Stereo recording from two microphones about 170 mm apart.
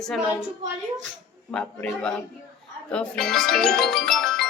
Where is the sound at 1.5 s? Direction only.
10° left (ahead or behind).